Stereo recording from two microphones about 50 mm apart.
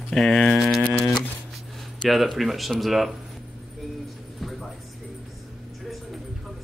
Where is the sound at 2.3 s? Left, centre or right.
Centre.